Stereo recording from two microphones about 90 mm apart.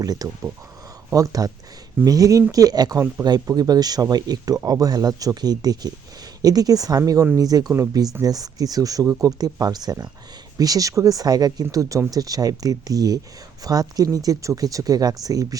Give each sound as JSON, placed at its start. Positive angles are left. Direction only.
{"t": 0.0, "sound": "speech", "side_deg": -45}